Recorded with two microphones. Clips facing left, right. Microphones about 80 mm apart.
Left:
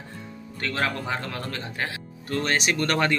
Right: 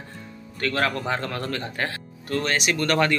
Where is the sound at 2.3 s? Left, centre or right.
Left.